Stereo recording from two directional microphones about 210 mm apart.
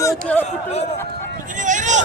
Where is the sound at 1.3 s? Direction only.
35° right (ahead or behind).